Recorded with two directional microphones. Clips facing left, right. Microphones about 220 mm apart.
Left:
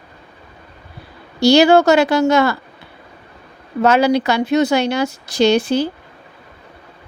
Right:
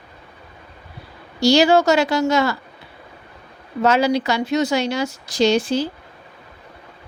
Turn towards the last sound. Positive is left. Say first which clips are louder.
# left 3 dB
turn(degrees=60)  # may be behind; listen again after turning